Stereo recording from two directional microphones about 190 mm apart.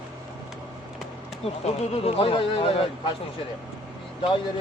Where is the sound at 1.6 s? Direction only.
30° left (ahead or behind).